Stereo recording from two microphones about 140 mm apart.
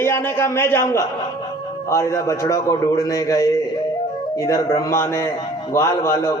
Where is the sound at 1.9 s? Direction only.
20° left (ahead or behind).